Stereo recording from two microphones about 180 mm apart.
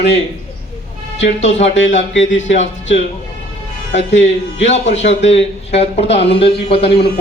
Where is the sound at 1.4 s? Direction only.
40° left (ahead or behind).